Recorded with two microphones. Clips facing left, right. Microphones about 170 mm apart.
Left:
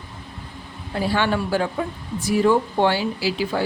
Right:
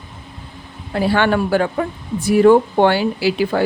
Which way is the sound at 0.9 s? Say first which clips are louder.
Right 5 dB; 65° right (ahead or behind).